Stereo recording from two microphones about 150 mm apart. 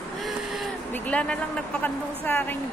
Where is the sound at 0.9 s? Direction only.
10° left (ahead or behind).